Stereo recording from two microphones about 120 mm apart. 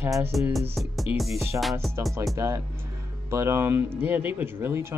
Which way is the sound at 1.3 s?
20° right (ahead or behind).